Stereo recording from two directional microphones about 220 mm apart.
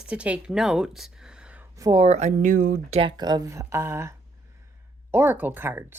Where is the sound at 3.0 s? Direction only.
20° right (ahead or behind).